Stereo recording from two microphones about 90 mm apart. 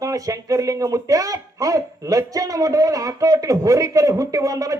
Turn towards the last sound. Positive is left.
turn(degrees=-40)  # may be behind; listen again after turning